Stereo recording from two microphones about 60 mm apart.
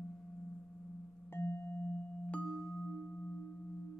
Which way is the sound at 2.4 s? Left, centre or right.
Centre.